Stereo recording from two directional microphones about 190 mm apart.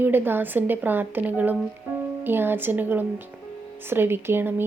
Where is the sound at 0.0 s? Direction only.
10° right (ahead or behind).